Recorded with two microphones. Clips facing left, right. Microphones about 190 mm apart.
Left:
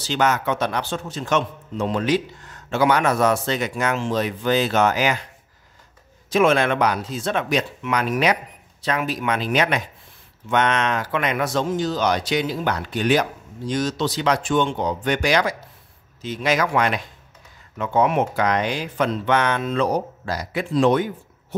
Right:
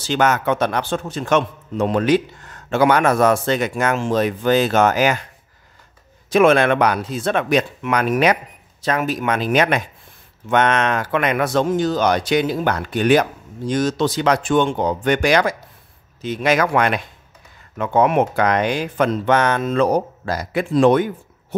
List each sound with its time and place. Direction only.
0.0 s a man's voice: 50° right (ahead or behind)
6.3 s a man's voice: 60° right (ahead or behind)